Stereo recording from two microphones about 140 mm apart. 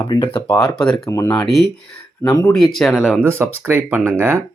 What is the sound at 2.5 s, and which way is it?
Speech, 5° left (ahead or behind).